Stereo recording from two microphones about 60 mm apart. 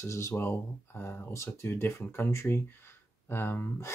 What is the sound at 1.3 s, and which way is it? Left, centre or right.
Speech, left.